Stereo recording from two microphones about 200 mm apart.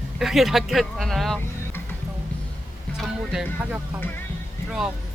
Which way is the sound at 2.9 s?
5° right (ahead or behind).